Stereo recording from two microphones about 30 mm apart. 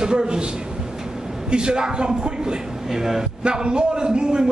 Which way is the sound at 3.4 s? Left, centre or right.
Right.